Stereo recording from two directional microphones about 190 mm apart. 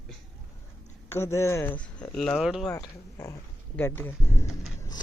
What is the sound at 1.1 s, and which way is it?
Speech, 15° left (ahead or behind).